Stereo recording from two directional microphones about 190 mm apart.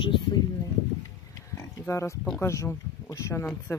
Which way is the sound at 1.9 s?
15° left (ahead or behind).